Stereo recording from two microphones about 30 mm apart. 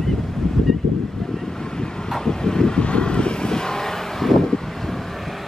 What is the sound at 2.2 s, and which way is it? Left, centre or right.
Vehicle, left.